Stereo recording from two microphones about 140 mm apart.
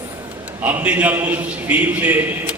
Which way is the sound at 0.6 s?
10° right (ahead or behind).